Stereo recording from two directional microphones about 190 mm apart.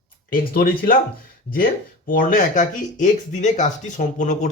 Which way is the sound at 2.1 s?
45° left (ahead or behind).